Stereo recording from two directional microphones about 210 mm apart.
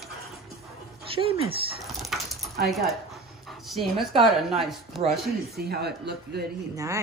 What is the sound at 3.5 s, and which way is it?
Dog, centre (ahead or behind).